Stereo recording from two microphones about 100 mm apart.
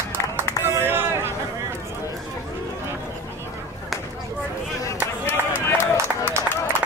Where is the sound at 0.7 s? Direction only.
25° right (ahead or behind).